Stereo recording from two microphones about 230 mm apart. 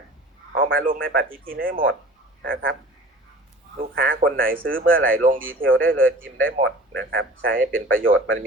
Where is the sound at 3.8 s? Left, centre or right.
Right.